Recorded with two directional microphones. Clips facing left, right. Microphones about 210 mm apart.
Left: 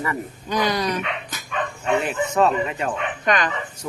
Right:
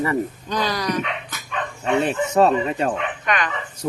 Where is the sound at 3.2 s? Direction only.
35° left (ahead or behind).